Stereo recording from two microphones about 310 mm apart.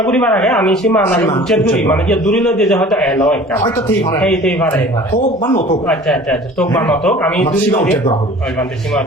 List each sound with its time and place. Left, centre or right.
0.0 s speech: centre
5.1 s speech: centre
5.9 s speech: centre
8.5 s speech: centre